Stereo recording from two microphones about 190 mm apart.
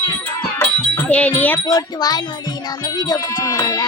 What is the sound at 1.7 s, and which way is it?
Music, 20° left (ahead or behind).